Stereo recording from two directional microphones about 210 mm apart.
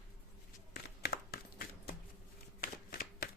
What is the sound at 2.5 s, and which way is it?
Shuffling cards, 45° left (ahead or behind).